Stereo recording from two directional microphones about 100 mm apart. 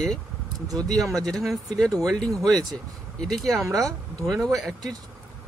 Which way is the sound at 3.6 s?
35° right (ahead or behind).